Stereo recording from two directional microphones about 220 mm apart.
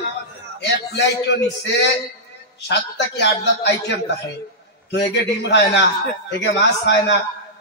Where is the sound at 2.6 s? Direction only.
50° left (ahead or behind).